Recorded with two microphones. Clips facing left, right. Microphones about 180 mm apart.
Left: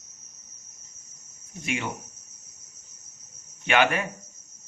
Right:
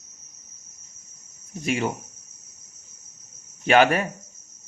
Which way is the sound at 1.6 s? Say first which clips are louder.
Right 6 dB; 35° right (ahead or behind).